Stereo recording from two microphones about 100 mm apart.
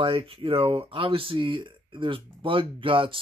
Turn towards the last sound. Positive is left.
turn(degrees=-60)  # may be behind; listen again after turning